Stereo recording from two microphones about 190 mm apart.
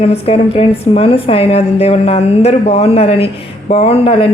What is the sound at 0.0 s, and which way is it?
Speech, 30° left (ahead or behind).